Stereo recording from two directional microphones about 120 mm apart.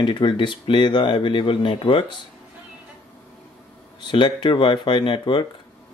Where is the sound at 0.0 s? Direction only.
40° left (ahead or behind).